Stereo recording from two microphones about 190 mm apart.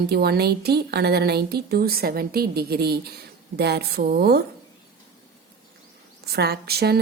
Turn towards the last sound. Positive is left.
turn(degrees=-55)  # may be behind; listen again after turning